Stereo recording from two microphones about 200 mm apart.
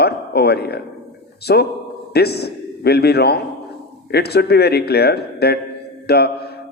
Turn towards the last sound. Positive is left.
turn(degrees=55)  # may be behind; listen again after turning